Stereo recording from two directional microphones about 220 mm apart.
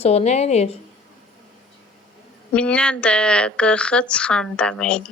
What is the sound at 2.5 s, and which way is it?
A woman's voice, 5° left (ahead or behind).